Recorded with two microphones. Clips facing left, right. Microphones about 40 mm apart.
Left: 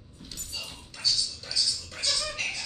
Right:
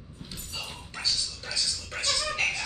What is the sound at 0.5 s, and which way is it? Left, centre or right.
Music, right.